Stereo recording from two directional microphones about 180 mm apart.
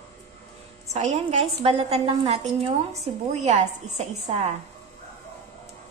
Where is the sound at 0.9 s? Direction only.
40° right (ahead or behind).